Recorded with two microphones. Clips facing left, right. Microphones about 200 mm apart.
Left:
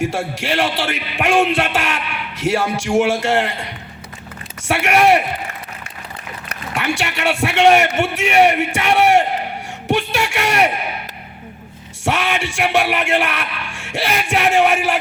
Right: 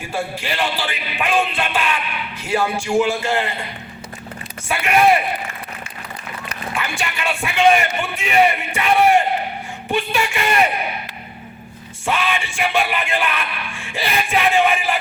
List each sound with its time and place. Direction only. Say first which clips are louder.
0.0 s speech: left 4 dB; 85° left
4.7 s speech: left 2 dB; 80° left
6.5 s speech: left 5 dB; 75° left (ahead or behind)
12.0 s speech: left 2 dB; 80° left